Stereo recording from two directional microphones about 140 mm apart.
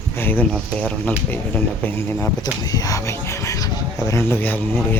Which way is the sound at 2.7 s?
25° left (ahead or behind).